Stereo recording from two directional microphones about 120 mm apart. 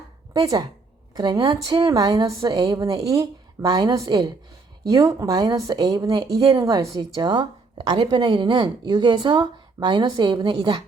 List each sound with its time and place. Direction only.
0.3 s speech: 30° right (ahead or behind)
2.0 s speech: 30° right (ahead or behind)
6.7 s speech: 30° right (ahead or behind)